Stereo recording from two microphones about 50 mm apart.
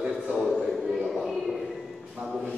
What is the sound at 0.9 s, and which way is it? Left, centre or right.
Music, centre.